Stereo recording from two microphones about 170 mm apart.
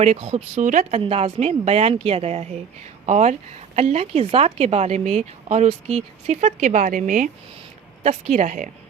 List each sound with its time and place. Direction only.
0.0 s a woman's voice: 40° right (ahead or behind)